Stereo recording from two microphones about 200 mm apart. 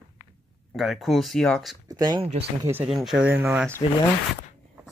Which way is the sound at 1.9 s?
20° right (ahead or behind).